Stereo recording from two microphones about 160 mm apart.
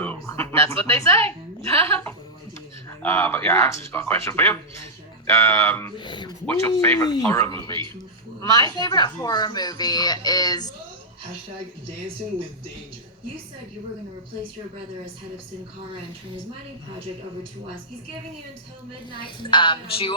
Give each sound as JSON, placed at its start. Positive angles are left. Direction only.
{"t": 0.0, "sound": "a sound", "side_deg": 10}
{"t": 0.9, "sound": "speech", "side_deg": 15}
{"t": 6.0, "sound": "a woman's voice", "side_deg": 30}
{"t": 6.4, "sound": "a woman's voice", "side_deg": 10}
{"t": 19.2, "sound": "speech", "side_deg": 30}